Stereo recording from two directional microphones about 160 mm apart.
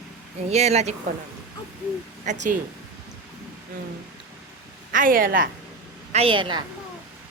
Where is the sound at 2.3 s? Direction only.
50° right (ahead or behind).